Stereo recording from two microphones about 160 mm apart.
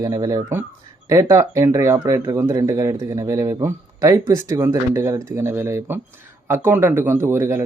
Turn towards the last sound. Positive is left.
turn(degrees=-15)  # may be behind; listen again after turning